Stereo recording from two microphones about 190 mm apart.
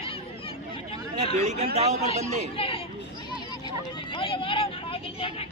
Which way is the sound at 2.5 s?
30° left (ahead or behind).